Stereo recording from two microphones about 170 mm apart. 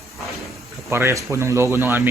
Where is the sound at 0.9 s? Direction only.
15° right (ahead or behind).